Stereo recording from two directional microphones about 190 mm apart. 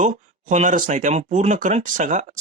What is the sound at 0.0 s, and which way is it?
Speech, 40° right (ahead or behind).